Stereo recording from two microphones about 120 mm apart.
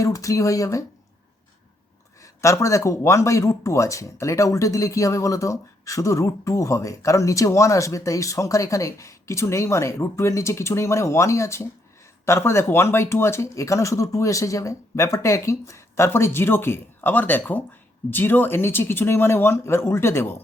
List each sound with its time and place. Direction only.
0.0 s speech: 25° left (ahead or behind)
2.2 s speech: 25° left (ahead or behind)